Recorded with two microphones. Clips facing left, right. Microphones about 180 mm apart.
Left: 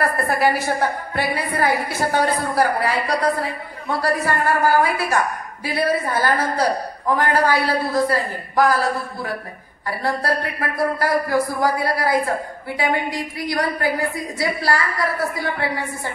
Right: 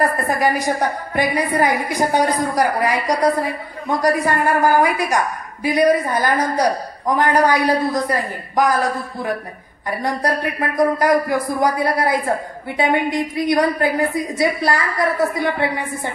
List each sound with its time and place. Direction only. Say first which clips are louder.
0.3 s a woman's voice: right 1 dB; 15° right (ahead or behind)